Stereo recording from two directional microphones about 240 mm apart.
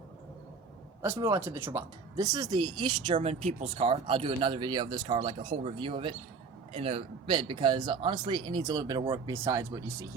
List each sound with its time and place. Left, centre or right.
1.2 s speech: centre